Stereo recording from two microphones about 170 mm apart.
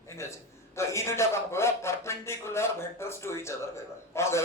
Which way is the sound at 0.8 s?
15° left (ahead or behind).